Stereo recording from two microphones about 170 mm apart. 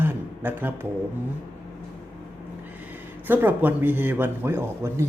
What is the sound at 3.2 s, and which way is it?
A man's voice, 10° right (ahead or behind).